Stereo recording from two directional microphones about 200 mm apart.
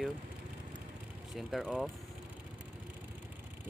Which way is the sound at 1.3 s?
Centre (ahead or behind).